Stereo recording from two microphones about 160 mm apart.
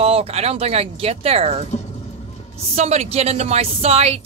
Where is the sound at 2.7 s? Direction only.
40° right (ahead or behind).